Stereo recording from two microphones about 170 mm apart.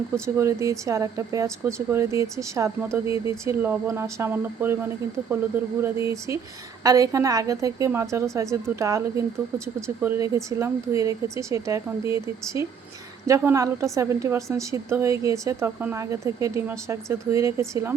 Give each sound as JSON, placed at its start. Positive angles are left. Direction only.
{"t": 0.3, "sound": "a woman's voice", "side_deg": -15}
{"t": 5.8, "sound": "a woman's voice", "side_deg": -15}